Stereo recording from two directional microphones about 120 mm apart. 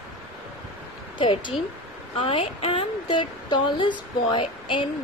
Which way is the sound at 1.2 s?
40° left (ahead or behind).